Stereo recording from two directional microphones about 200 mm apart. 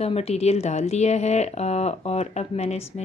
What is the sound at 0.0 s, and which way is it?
A woman's voice, 30° left (ahead or behind).